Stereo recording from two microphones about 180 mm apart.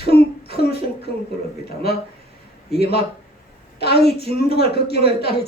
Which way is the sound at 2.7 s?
65° left (ahead or behind).